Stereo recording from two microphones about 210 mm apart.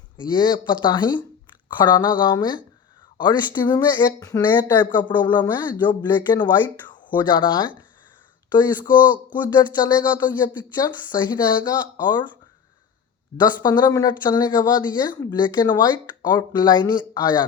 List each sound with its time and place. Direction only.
0.2 s speech: 20° left (ahead or behind)
13.4 s speech: 20° left (ahead or behind)